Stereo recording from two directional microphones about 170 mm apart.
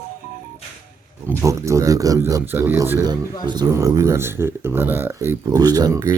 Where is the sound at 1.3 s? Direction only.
15° right (ahead or behind).